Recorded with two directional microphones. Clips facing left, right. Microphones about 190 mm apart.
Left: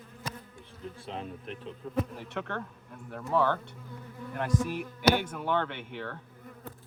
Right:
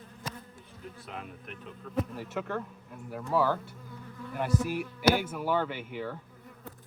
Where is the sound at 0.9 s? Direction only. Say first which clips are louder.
Left 4 dB; 30° left (ahead or behind).